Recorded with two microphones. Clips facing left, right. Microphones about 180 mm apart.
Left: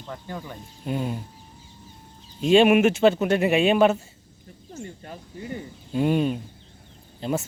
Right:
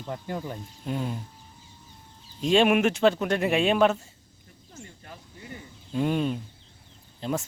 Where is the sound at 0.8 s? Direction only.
10° left (ahead or behind).